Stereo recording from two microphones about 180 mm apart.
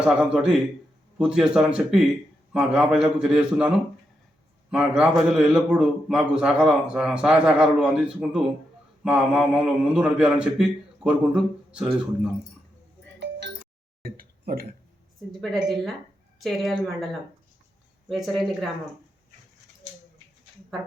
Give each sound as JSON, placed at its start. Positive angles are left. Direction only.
{"t": 0.0, "sound": "a man's voice", "side_deg": -5}
{"t": 14.0, "sound": "a sound", "side_deg": -55}
{"t": 15.3, "sound": "a man's voice", "side_deg": 0}
{"t": 18.1, "sound": "a man's voice", "side_deg": 0}